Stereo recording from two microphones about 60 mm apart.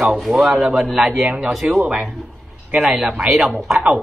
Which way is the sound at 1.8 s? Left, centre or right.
Right.